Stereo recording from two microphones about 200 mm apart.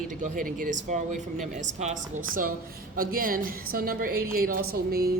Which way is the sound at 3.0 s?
45° right (ahead or behind).